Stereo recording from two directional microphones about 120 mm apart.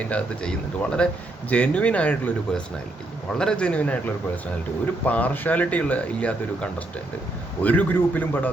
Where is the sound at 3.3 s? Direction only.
5° left (ahead or behind).